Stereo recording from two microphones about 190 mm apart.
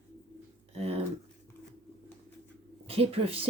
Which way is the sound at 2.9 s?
30° right (ahead or behind).